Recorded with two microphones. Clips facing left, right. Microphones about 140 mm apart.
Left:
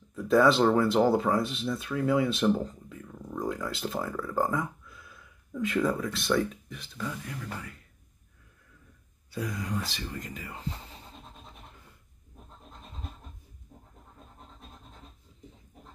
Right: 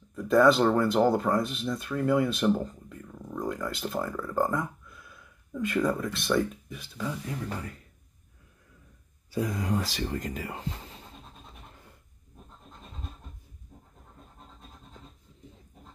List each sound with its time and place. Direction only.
0.1 s speech: centre (ahead or behind)
7.3 s speech: 35° right (ahead or behind)
9.5 s speech: 40° right (ahead or behind)